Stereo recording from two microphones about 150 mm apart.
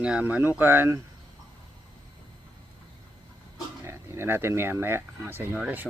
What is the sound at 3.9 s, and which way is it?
Speech, 15° right (ahead or behind).